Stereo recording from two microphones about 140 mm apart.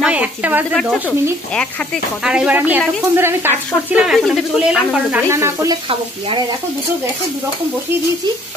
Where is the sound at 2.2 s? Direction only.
5° right (ahead or behind).